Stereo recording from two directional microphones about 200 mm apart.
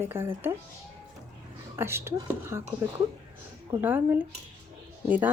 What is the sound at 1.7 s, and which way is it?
Speech, 10° right (ahead or behind).